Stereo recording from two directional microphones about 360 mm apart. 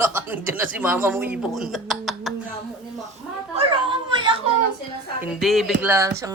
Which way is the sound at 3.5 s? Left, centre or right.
Centre.